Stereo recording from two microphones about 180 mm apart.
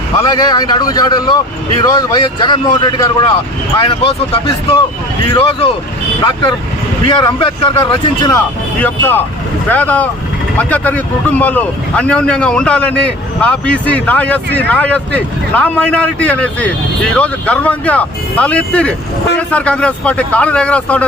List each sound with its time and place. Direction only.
0.2 s a man's voice: 20° left (ahead or behind)
7.1 s a man's voice: 25° left (ahead or behind)
8.8 s speech: 10° left (ahead or behind)